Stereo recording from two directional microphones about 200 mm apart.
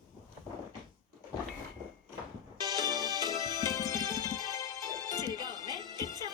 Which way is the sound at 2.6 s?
20° right (ahead or behind).